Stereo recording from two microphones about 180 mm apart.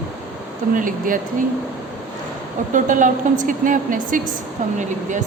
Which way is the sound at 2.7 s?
45° right (ahead or behind).